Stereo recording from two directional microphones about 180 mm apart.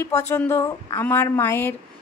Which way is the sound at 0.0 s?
15° left (ahead or behind).